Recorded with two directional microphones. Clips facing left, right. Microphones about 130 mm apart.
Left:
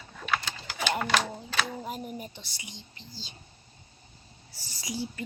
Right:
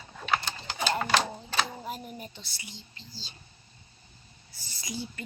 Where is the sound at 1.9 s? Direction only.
5° left (ahead or behind).